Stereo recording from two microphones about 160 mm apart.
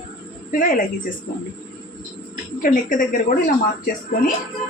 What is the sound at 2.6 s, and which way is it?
Speech, 60° left (ahead or behind).